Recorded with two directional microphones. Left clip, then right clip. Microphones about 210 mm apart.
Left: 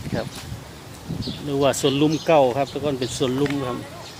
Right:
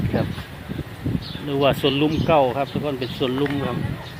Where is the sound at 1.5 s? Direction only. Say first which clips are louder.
Right 1 dB; 10° left (ahead or behind).